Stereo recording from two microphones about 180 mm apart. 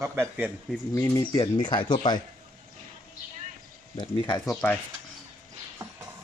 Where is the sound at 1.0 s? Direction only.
15° left (ahead or behind).